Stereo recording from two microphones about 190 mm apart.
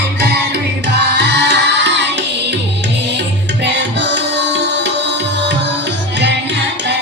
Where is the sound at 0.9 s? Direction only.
65° right (ahead or behind).